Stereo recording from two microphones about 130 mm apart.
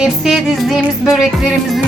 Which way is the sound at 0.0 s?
Centre (ahead or behind).